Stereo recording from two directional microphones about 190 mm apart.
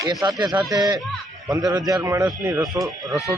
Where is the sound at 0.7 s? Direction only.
20° right (ahead or behind).